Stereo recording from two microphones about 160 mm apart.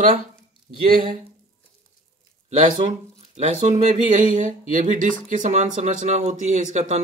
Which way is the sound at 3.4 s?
45° right (ahead or behind).